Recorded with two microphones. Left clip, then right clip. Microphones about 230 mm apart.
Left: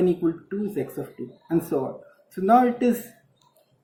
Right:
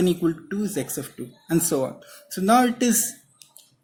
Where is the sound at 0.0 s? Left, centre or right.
Right.